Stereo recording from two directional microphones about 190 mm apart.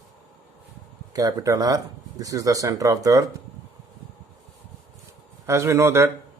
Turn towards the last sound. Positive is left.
turn(degrees=-15)  # may be behind; listen again after turning